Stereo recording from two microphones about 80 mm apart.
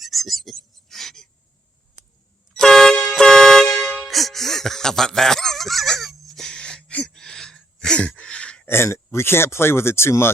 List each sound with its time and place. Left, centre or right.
0.0 s a sound: centre
2.6 s music: centre
3.1 s vehicle horn: centre
4.1 s fowl: centre
8.6 s speech: left